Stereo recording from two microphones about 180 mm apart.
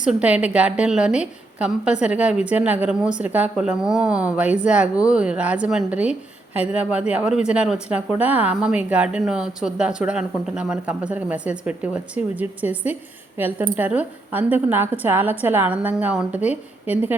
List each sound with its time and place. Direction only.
0.0 s speech: 5° right (ahead or behind)